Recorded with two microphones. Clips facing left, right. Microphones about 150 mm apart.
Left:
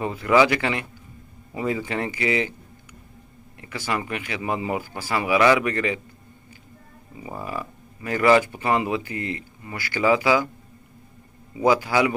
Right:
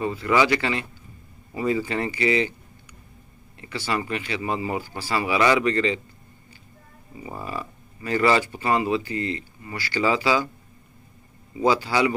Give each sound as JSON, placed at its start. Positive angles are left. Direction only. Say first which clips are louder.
{"t": 0.0, "sound": "speech", "louder": "left 3 dB", "side_deg": 15}
{"t": 3.6, "sound": "speech", "louder": "even", "side_deg": 15}
{"t": 7.2, "sound": "speech", "louder": "left 1 dB", "side_deg": 10}
{"t": 11.6, "sound": "speech", "louder": "left 1 dB", "side_deg": 15}